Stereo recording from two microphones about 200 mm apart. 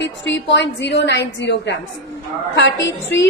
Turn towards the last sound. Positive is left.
turn(degrees=65)  # may be behind; listen again after turning